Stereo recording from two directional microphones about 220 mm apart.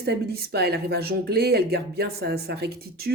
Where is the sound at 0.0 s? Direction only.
50° right (ahead or behind).